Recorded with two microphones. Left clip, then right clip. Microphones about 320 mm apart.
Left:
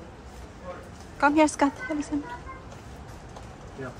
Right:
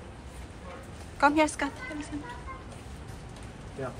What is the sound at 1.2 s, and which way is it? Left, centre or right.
Speech, centre.